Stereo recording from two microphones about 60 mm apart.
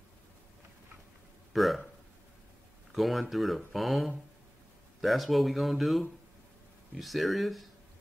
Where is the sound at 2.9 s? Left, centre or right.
Centre.